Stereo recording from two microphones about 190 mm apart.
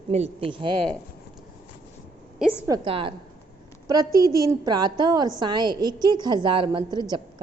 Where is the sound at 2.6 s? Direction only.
25° right (ahead or behind).